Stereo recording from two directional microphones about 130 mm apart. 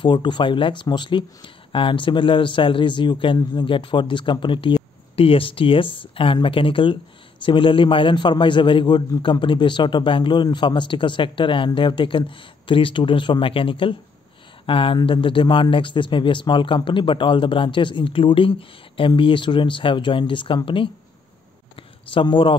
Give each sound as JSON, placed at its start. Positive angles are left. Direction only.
{"t": 0.0, "sound": "speech", "side_deg": 40}
{"t": 22.1, "sound": "speech", "side_deg": 40}